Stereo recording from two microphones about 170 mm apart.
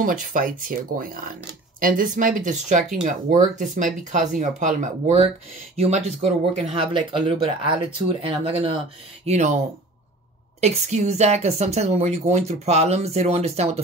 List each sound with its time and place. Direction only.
0.0 s a woman's voice: 55° right (ahead or behind); by 8.7 s 30° right (ahead or behind)
9.2 s speech: 40° right (ahead or behind)
10.6 s a woman's voice: 45° right (ahead or behind)